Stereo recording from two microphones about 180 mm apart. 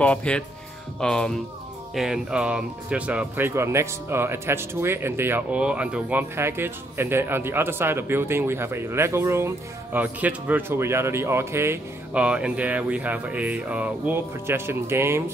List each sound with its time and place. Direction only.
0.0 s speech: 5° left (ahead or behind); by 15.3 s 15° right (ahead or behind)